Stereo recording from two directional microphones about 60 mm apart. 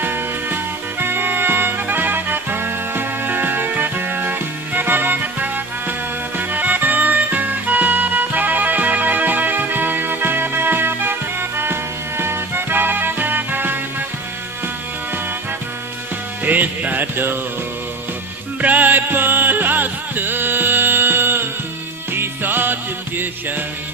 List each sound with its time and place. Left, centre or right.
0.0 s music: right
16.4 s music: right
18.6 s music: right